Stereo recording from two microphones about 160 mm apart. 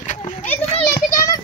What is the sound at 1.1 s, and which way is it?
Speech, 20° left (ahead or behind).